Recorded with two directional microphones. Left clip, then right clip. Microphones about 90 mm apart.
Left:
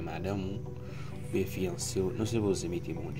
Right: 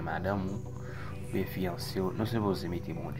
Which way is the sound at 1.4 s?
20° left (ahead or behind).